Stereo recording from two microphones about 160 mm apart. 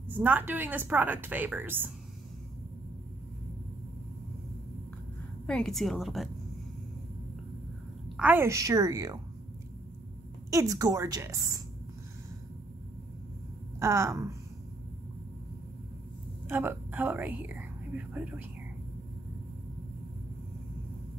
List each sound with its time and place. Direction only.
0.1 s a woman's voice: 10° right (ahead or behind)
5.5 s a woman's voice: 5° left (ahead or behind)
8.2 s a woman's voice: 10° right (ahead or behind)
10.5 s a woman's voice: 20° right (ahead or behind)
13.7 s a woman's voice: 15° right (ahead or behind)
16.4 s speech: 15° right (ahead or behind)